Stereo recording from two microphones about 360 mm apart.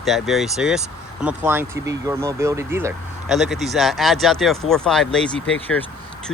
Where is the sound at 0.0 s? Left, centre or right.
Centre.